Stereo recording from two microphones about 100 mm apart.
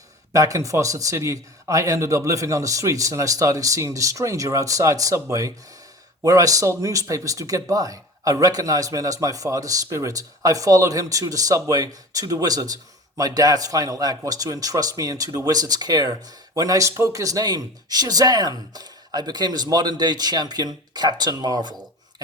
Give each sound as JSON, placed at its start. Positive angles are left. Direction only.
{"t": 0.3, "sound": "speech", "side_deg": -35}